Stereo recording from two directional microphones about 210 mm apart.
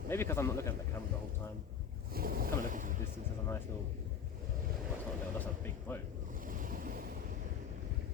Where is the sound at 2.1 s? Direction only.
45° right (ahead or behind).